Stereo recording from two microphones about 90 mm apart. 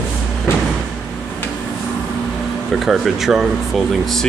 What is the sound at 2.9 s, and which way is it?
Speech, 5° right (ahead or behind).